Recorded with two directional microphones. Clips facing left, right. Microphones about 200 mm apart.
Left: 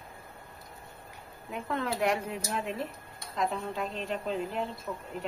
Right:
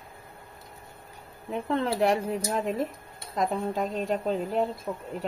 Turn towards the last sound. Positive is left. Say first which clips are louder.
# right 7 dB
turn(degrees=-30)  # may be behind; listen again after turning